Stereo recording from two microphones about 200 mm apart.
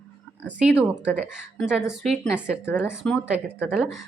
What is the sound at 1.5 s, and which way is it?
Speech, 5° right (ahead or behind).